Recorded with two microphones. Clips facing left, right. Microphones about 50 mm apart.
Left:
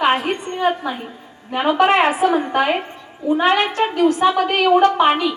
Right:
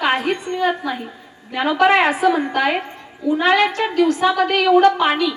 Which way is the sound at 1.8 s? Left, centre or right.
Left.